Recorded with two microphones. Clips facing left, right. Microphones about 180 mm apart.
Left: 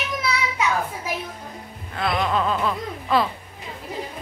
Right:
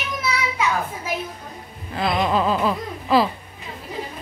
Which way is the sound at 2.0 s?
20° right (ahead or behind).